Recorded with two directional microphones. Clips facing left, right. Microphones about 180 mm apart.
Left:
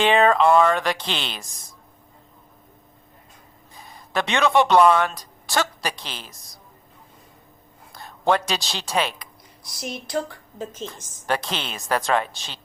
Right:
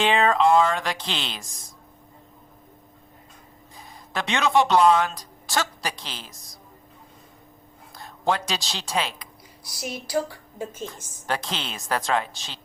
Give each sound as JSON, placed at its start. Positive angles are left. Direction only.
{"t": 0.0, "sound": "a woman's voice", "side_deg": 60}
{"t": 4.1, "sound": "a woman's voice", "side_deg": 60}
{"t": 7.9, "sound": "speech", "side_deg": 60}
{"t": 9.8, "sound": "a woman's voice", "side_deg": -5}
{"t": 11.3, "sound": "a woman's voice", "side_deg": 60}